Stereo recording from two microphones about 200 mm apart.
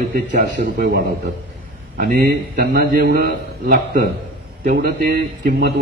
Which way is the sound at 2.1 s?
50° right (ahead or behind).